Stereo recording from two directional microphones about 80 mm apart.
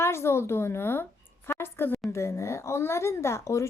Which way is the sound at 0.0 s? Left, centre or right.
Left.